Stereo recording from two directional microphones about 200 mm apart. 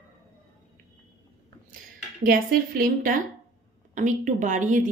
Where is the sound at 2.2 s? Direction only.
45° right (ahead or behind).